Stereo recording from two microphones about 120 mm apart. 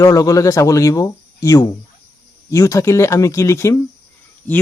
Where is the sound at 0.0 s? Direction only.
30° left (ahead or behind).